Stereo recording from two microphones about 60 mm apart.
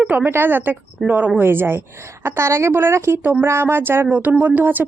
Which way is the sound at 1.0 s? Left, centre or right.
Centre.